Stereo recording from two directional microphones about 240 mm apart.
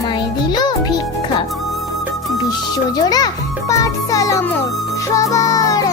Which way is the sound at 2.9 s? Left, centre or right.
Centre.